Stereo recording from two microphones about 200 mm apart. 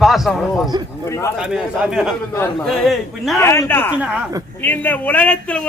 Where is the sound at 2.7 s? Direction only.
Centre (ahead or behind).